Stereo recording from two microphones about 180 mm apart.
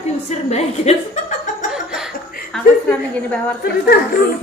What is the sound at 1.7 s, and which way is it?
Laughter, 5° right (ahead or behind).